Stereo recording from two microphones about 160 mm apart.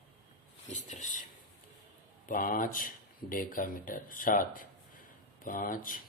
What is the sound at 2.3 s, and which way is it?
Speech, 60° left (ahead or behind).